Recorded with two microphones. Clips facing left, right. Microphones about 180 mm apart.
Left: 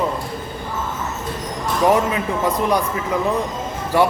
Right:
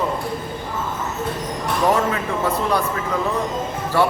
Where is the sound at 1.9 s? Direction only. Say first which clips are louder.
Left 2 dB; 15° left (ahead or behind).